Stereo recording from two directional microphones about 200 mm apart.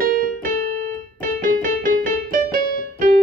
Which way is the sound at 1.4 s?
45° right (ahead or behind).